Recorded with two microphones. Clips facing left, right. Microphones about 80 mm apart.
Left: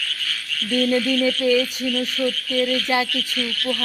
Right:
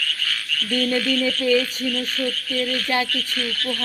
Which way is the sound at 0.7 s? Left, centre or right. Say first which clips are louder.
Left 2 dB; centre.